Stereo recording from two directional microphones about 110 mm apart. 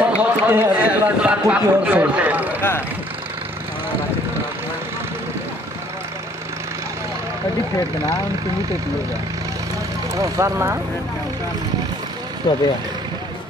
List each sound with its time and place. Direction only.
0.0 s speech: 15° right (ahead or behind)
10.1 s speech: 30° right (ahead or behind)